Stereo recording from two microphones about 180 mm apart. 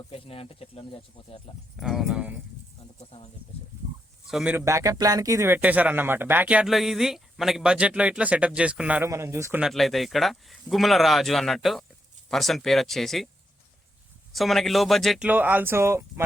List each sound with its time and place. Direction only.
0.1 s speech: 30° left (ahead or behind)
1.7 s speech: centre (ahead or behind)
3.0 s speech: 35° left (ahead or behind)
4.3 s speech: 5° right (ahead or behind)
4.5 s speech: 15° right (ahead or behind); by 13.2 s centre (ahead or behind)
14.3 s speech: centre (ahead or behind)
15.3 s speech: 10° right (ahead or behind)